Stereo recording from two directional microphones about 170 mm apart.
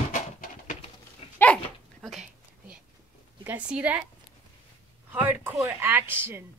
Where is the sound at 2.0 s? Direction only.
Centre (ahead or behind).